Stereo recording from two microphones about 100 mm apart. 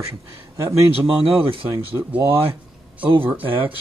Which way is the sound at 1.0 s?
60° right (ahead or behind).